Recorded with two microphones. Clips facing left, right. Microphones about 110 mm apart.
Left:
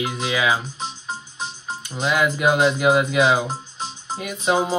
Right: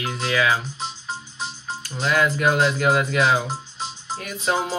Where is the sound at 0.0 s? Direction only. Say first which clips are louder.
Even; 15° left (ahead or behind).